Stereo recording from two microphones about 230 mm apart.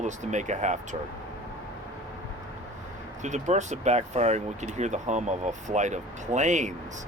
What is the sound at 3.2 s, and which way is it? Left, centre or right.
Speech, right.